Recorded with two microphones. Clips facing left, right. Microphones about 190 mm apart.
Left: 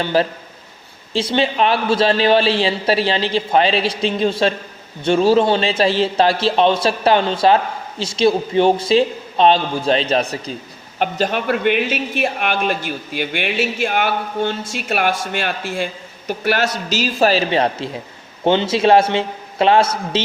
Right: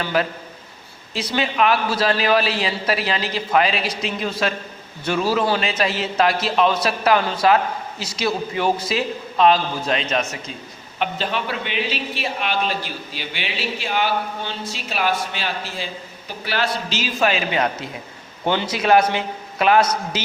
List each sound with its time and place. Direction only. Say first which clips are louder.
0.0 s a man's voice: left 4 dB; 30° left (ahead or behind)
11.0 s a man's voice: left 5 dB; 45° left (ahead or behind); by 20.2 s 25° left (ahead or behind)